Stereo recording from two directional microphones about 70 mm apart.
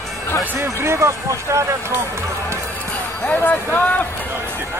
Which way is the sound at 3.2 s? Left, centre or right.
Left.